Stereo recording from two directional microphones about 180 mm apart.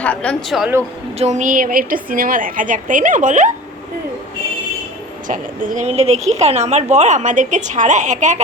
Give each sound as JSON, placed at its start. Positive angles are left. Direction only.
{"t": 0.0, "sound": "speech", "side_deg": 5}
{"t": 1.2, "sound": "a woman's voice", "side_deg": -40}
{"t": 5.3, "sound": "a woman's voice", "side_deg": -45}